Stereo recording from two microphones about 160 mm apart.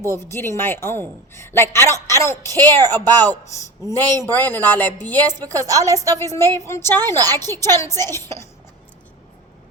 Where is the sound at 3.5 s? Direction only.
20° left (ahead or behind).